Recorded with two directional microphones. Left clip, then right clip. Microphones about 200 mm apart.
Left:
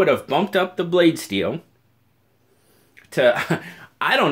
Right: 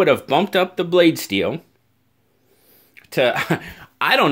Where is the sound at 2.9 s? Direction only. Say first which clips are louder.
Left 1 dB; 35° right (ahead or behind).